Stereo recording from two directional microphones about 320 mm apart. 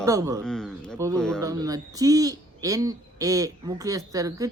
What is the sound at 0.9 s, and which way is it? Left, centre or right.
Speech, centre.